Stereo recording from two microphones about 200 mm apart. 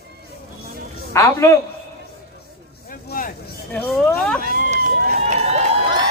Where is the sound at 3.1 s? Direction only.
45° left (ahead or behind).